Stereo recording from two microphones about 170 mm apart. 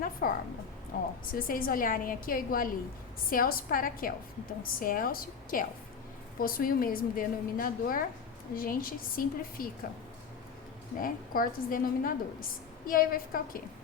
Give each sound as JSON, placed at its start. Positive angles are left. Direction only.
{"t": 0.0, "sound": "music", "side_deg": 55}
{"t": 0.9, "sound": "a sound", "side_deg": 65}
{"t": 1.3, "sound": "a woman's voice", "side_deg": 55}
{"t": 11.0, "sound": "a woman's voice", "side_deg": 55}